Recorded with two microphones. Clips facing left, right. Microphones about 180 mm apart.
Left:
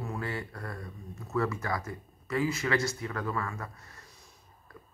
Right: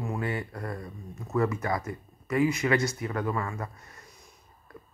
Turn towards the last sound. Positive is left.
turn(degrees=-20)  # may be behind; listen again after turning